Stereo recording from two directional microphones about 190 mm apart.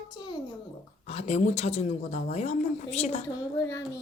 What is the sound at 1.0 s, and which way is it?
Speech, 35° left (ahead or behind).